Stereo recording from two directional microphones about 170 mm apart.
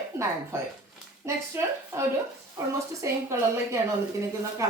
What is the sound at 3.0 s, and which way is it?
Speech, 15° right (ahead or behind).